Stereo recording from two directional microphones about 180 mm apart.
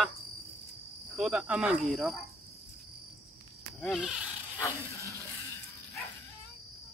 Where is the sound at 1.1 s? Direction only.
Centre (ahead or behind).